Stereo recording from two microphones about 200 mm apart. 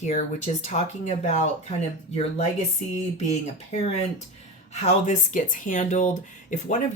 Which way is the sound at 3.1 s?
35° left (ahead or behind).